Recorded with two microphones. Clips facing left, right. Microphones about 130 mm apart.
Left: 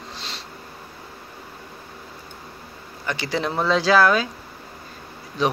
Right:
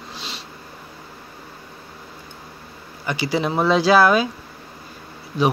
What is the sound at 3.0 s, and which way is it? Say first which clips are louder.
Speech: right 3 dB; 5° right (ahead or behind).